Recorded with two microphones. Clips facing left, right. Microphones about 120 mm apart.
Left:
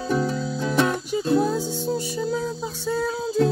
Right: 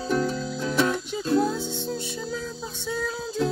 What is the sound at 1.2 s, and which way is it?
Music, 10° left (ahead or behind).